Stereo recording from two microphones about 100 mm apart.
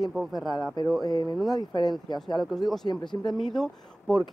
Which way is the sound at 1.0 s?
45° left (ahead or behind).